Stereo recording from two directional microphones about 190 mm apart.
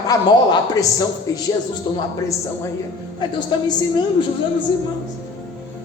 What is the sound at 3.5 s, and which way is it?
Speech, 25° left (ahead or behind).